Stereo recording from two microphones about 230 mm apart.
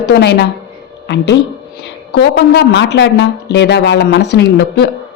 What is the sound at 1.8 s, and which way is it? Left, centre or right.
A woman's voice, left.